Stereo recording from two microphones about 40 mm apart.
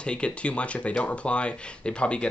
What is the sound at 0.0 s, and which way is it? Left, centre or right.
Speech, left.